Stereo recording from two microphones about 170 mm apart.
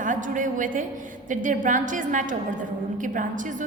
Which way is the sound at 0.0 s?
50° right (ahead or behind).